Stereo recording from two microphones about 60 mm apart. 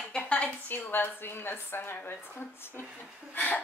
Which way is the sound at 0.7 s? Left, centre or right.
Left.